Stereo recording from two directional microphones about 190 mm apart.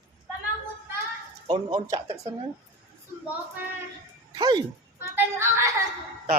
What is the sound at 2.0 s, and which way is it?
Speech, 35° right (ahead or behind).